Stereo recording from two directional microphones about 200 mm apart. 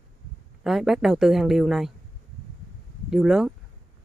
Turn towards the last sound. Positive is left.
turn(degrees=0)  # may be behind; listen again after turning